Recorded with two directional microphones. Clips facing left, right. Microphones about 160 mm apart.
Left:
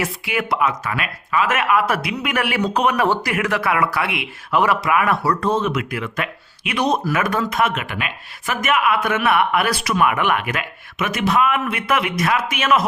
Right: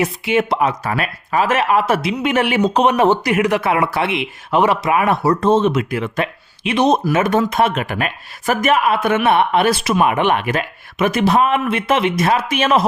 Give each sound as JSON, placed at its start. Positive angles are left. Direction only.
{"t": 0.0, "sound": "speech", "side_deg": -25}